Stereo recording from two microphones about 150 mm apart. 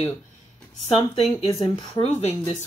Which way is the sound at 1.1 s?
40° left (ahead or behind).